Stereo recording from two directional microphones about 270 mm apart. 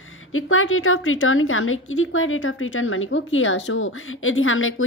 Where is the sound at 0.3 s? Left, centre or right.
Left.